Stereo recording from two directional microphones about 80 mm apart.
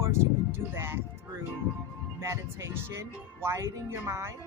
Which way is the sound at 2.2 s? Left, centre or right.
Right.